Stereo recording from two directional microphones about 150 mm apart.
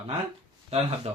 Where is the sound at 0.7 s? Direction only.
40° right (ahead or behind).